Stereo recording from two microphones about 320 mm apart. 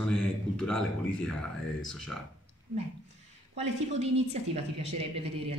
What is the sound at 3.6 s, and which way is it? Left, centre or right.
A woman's voice, centre.